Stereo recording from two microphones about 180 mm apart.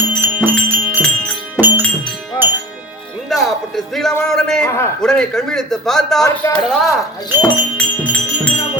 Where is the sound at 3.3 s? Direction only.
Centre (ahead or behind).